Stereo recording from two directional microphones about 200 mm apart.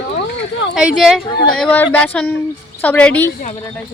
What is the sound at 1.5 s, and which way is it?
Speech, 10° left (ahead or behind).